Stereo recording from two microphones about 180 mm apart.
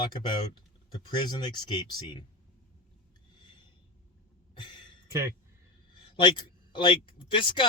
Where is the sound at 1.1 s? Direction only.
25° left (ahead or behind).